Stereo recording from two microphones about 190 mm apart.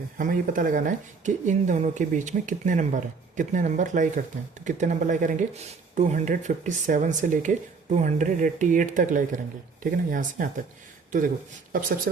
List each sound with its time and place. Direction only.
0.2 s speech: 45° right (ahead or behind)
11.7 s speech: 45° right (ahead or behind)